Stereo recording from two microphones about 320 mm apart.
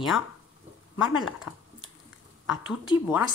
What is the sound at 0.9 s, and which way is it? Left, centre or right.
Speech, centre.